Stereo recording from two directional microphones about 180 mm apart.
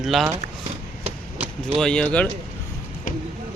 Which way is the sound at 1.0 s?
35° right (ahead or behind).